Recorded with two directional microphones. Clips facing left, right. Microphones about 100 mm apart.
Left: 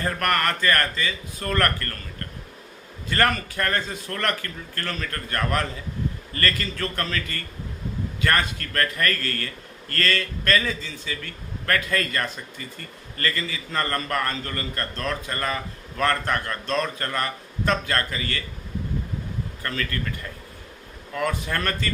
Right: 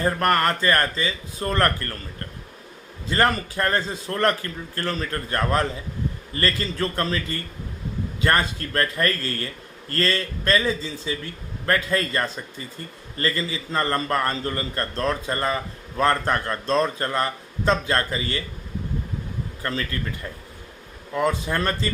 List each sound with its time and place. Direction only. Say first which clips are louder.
0.0 s a man's voice: right 3 dB; 25° right (ahead or behind)
3.1 s a man's voice: right 2 dB; 25° right (ahead or behind)
19.6 s a man's voice: right 1 dB; 25° right (ahead or behind)